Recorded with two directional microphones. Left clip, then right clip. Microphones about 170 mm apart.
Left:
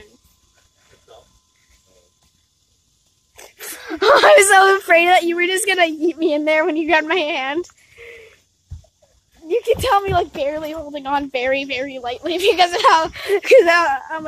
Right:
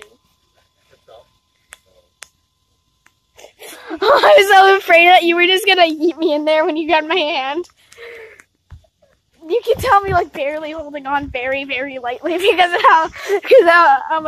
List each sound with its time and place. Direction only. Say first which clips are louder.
3.3 s sneeze: left 1 dB; 50° left (ahead or behind)
3.7 s speech: even; 5° left (ahead or behind)
4.4 s a woman's voice: right 2 dB; centre (ahead or behind)
7.9 s wheeze: right 5 dB; 15° right (ahead or behind)
9.5 s a sound: right 2 dB; 10° right (ahead or behind)
9.8 s a woman's voice: right 3 dB; 5° right (ahead or behind)
10.9 s speech: right 1 dB; 15° left (ahead or behind)
11.3 s a woman's voice: left 1 dB; 35° left (ahead or behind)
11.8 s a woman's voice: right 3 dB; 5° left (ahead or behind); by 14.2 s 10° right (ahead or behind)